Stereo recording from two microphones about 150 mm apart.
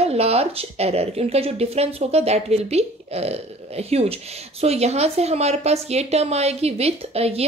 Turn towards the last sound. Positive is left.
turn(degrees=-45)  # may be behind; listen again after turning